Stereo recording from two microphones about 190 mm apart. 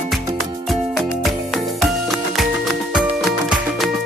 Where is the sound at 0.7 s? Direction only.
Centre (ahead or behind).